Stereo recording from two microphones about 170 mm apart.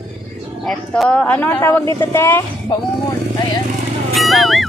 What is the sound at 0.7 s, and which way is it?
Speech, 5° left (ahead or behind).